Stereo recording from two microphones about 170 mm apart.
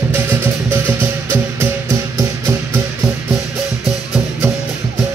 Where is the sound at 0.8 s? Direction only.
15° right (ahead or behind).